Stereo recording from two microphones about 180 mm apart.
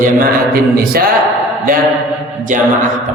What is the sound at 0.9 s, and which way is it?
Speech, 60° right (ahead or behind).